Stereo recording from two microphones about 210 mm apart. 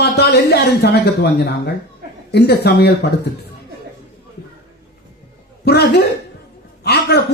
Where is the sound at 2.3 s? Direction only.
50° left (ahead or behind).